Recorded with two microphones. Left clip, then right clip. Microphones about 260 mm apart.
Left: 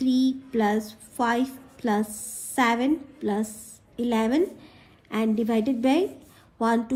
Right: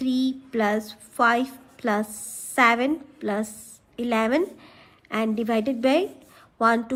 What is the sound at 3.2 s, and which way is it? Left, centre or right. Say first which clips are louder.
A woman's voice: right 1 dB; right.